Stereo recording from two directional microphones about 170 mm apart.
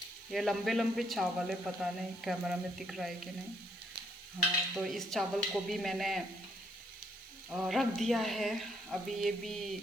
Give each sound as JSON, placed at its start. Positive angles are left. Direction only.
{"t": 0.3, "sound": "speech", "side_deg": 0}
{"t": 4.4, "sound": "speech", "side_deg": 0}
{"t": 7.5, "sound": "speech", "side_deg": 0}